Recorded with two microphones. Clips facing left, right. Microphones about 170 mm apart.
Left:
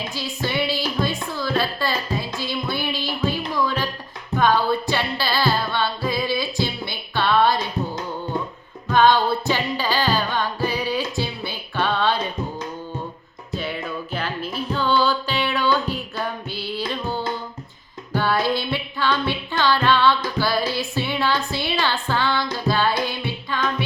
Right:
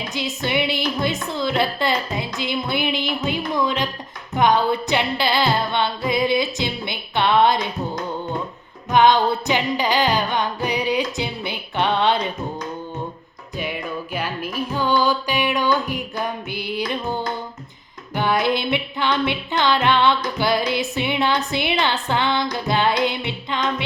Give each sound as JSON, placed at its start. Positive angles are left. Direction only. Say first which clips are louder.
{"t": 0.1, "sound": "music", "louder": "right 3 dB", "side_deg": -20}
{"t": 3.2, "sound": "speech", "louder": "even", "side_deg": -20}
{"t": 4.4, "sound": "music", "louder": "right 1 dB", "side_deg": -20}
{"t": 8.9, "sound": "music", "louder": "right 1 dB", "side_deg": -15}
{"t": 13.6, "sound": "music", "louder": "right 2 dB", "side_deg": -15}